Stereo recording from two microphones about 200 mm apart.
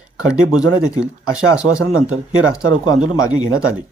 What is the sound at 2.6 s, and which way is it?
Speech, 90° right.